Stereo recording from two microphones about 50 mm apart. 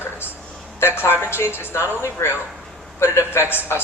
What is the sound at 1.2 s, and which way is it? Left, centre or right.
A woman's voice, left.